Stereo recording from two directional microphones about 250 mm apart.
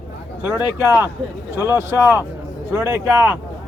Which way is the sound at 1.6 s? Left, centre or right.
Centre.